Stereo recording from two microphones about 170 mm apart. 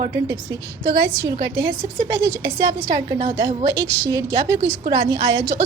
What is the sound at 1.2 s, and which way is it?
A woman's voice, 20° right (ahead or behind).